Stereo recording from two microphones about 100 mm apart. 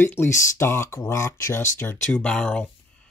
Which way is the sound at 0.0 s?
25° left (ahead or behind).